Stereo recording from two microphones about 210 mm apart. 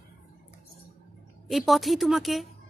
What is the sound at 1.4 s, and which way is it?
A woman's voice, centre (ahead or behind).